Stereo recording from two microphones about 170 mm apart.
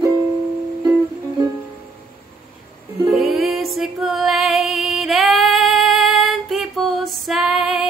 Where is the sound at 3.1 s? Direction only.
Centre (ahead or behind).